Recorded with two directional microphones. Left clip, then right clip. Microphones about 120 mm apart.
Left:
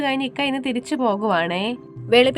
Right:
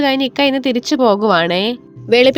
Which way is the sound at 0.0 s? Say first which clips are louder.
Right 8 dB; 45° right (ahead or behind).